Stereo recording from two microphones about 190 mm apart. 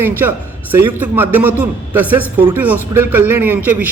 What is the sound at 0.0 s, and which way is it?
A man's voice, 10° right (ahead or behind).